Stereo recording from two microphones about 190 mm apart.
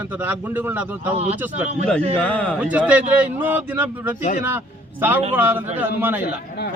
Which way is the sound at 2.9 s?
10° right (ahead or behind).